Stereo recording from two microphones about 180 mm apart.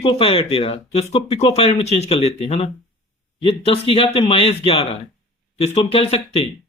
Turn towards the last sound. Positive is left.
turn(degrees=35)  # may be behind; listen again after turning